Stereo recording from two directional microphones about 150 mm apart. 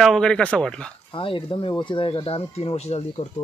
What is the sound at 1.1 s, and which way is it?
Speech, 35° left (ahead or behind).